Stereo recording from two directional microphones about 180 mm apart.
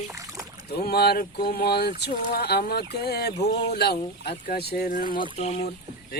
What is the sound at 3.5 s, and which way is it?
Speech, 35° left (ahead or behind).